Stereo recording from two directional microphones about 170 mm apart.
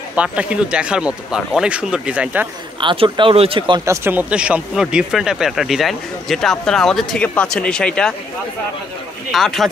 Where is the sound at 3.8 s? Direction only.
10° right (ahead or behind); by 8.1 s 5° left (ahead or behind).